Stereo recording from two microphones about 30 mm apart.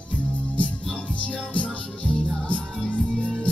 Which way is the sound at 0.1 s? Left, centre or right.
Left.